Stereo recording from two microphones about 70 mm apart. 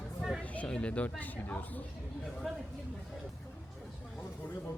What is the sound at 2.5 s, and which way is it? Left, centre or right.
Speech, centre.